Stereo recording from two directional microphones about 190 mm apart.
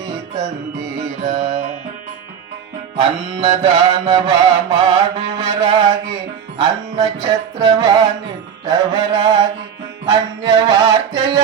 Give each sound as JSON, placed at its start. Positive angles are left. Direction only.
{"t": 0.0, "sound": "music", "side_deg": -20}
{"t": 1.2, "sound": "music", "side_deg": -40}
{"t": 2.9, "sound": "music", "side_deg": -25}
{"t": 3.6, "sound": "mantra", "side_deg": -20}
{"t": 10.1, "sound": "a sound", "side_deg": -20}